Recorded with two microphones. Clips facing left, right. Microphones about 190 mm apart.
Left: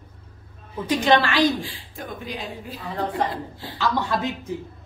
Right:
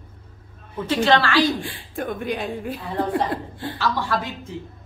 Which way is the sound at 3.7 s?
20° left (ahead or behind).